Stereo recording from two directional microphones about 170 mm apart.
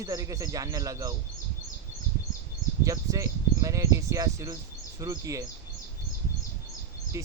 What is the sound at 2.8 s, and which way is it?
Speech, 20° right (ahead or behind).